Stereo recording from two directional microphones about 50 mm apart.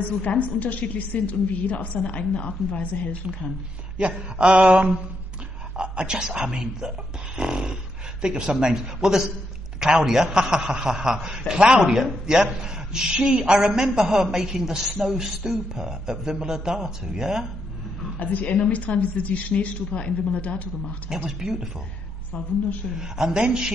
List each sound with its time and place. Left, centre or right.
0.2 s a woman's voice: left
4.0 s mantra: right
5.8 s a woman's voice: centre
7.3 s dog: centre
8.2 s a woman's voice: centre
18.2 s a woman's voice: left
21.4 s a woman's voice: centre
22.9 s a woman's voice: centre